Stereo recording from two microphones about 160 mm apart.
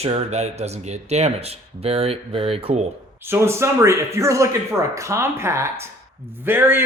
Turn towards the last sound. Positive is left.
turn(degrees=-15)  # may be behind; listen again after turning